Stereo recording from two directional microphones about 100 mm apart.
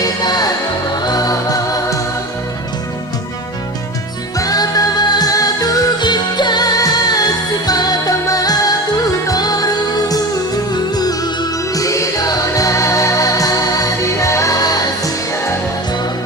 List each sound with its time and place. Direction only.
0.0 s music: 45° left (ahead or behind)
4.4 s music: 40° left (ahead or behind)